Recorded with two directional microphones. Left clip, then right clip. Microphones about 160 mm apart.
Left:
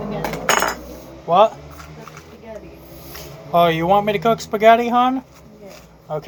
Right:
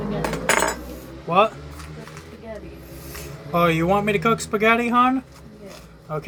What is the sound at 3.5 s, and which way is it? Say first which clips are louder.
Speech: left 5 dB; 50° right (ahead or behind).